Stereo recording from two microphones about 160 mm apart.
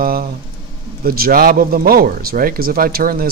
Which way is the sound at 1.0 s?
70° right (ahead or behind).